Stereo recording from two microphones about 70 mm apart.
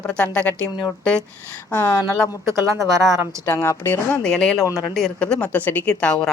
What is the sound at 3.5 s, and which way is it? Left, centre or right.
Speech, left.